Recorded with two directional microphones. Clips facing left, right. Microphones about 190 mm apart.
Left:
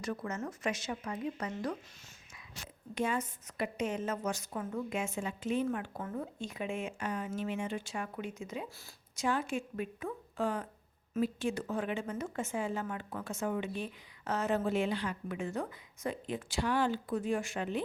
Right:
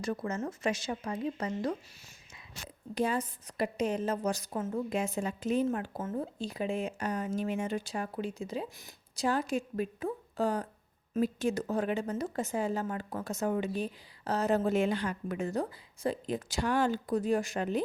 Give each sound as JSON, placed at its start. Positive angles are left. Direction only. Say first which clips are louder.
{"t": 0.0, "sound": "a woman's voice", "louder": "right 4 dB", "side_deg": -30}
{"t": 2.9, "sound": "a woman's voice", "louder": "right 3 dB", "side_deg": -35}